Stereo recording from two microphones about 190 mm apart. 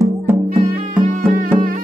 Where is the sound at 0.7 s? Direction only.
45° right (ahead or behind).